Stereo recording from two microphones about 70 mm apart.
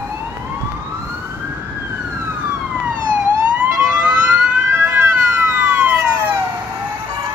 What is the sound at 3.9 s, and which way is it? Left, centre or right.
Emergency vehicle, centre.